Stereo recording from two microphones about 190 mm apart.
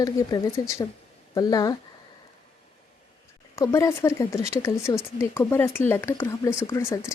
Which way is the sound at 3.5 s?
15° left (ahead or behind).